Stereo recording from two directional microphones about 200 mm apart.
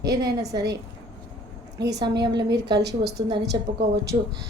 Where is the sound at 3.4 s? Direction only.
55° right (ahead or behind).